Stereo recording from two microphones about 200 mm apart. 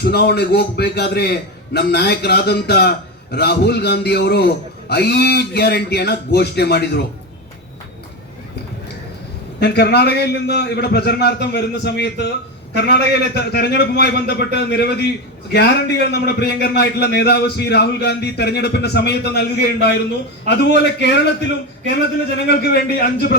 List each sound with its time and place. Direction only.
0.0 s a man's voice: 55° left (ahead or behind)
9.6 s a man's voice: 55° left (ahead or behind)